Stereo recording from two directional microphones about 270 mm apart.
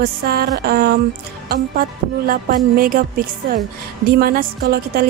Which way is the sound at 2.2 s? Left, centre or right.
Right.